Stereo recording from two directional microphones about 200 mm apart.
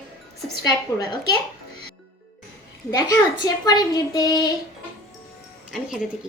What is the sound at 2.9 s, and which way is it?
A child's voice, 20° left (ahead or behind).